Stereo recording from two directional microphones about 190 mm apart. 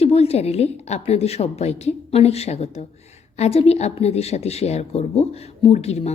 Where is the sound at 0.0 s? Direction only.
35° left (ahead or behind).